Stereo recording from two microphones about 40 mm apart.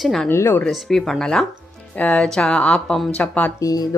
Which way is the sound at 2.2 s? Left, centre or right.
Centre.